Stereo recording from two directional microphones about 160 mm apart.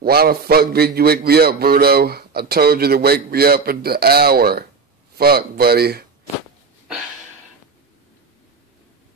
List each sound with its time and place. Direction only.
0.0 s a man's voice: 70° right (ahead or behind)